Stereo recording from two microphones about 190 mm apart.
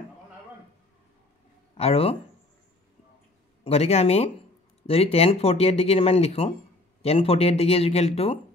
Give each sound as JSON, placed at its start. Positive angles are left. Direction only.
{"t": 1.8, "sound": "speech", "side_deg": 30}
{"t": 3.6, "sound": "speech", "side_deg": 30}